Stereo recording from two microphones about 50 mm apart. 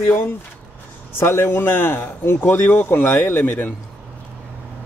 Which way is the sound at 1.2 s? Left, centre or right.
Left.